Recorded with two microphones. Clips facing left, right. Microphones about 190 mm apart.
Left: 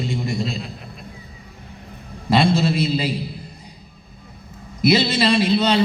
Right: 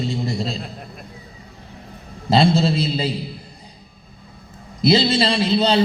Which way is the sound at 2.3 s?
30° right (ahead or behind).